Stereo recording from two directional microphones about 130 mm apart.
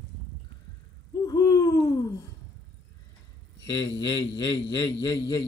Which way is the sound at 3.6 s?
35° left (ahead or behind).